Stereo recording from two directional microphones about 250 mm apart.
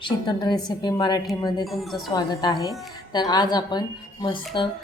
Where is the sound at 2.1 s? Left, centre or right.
Centre.